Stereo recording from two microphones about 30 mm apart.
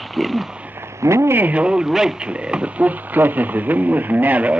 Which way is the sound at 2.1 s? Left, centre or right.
Right.